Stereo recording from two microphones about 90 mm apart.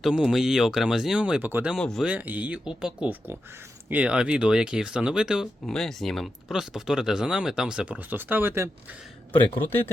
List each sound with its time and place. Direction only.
0.0 s speech: 5° right (ahead or behind)
1.8 s speech: 5° left (ahead or behind)
2.0 s speech: 20° right (ahead or behind)
5.6 s speech: 5° left (ahead or behind); by 8.7 s 25° right (ahead or behind)
9.6 s speech: 25° left (ahead or behind)